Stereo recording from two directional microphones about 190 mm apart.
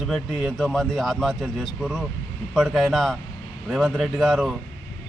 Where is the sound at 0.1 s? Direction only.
Centre (ahead or behind).